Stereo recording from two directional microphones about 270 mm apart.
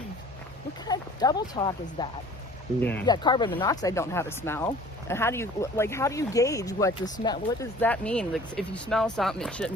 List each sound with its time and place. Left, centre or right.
0.9 s speech: centre